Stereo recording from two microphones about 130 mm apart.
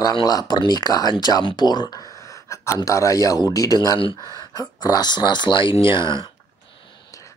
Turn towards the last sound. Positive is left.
turn(degrees=40)  # may be behind; listen again after turning